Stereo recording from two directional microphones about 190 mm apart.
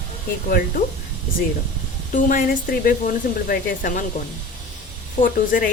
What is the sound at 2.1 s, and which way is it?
A woman's voice, 45° left (ahead or behind).